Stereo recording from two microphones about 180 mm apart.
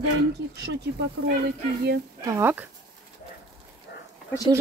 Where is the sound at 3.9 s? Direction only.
65° left (ahead or behind).